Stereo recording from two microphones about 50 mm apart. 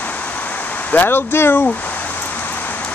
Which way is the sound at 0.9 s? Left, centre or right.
Left.